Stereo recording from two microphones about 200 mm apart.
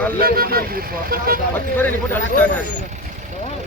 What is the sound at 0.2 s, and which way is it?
Speech, 50° right (ahead or behind).